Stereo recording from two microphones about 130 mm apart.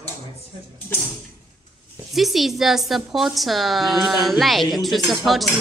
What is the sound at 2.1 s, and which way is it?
A woman's voice, centre (ahead or behind).